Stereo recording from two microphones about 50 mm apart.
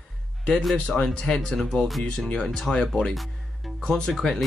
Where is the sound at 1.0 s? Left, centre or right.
Centre.